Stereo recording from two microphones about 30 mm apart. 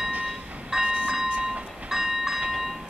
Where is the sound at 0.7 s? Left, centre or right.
Centre.